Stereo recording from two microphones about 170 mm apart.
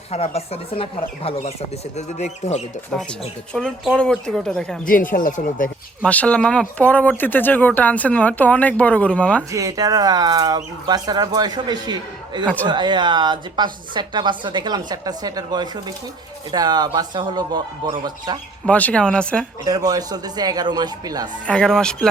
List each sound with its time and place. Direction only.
0.1 s speech: 35° left (ahead or behind)
3.9 s speech: 5° left (ahead or behind)
4.9 s speech: 55° left (ahead or behind)
6.1 s speech: 10° left (ahead or behind)
9.5 s a woman's voice: 20° right (ahead or behind)
18.6 s speech: 10° left (ahead or behind)
19.6 s a woman's voice: 20° right (ahead or behind)
21.4 s speech: 5° left (ahead or behind)